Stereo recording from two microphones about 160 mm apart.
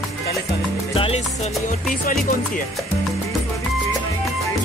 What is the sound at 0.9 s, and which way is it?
Music, 35° left (ahead or behind).